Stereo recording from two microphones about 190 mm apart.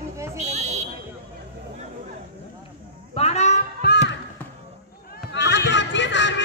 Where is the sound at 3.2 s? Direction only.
35° left (ahead or behind).